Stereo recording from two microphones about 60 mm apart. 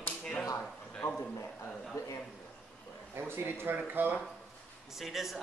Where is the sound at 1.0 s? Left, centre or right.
Left.